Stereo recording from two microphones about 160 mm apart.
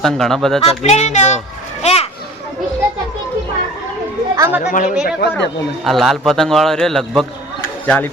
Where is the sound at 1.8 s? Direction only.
40° left (ahead or behind).